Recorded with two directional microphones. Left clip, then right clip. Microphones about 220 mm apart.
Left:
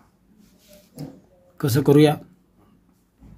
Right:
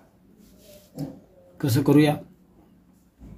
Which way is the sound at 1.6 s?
40° left (ahead or behind).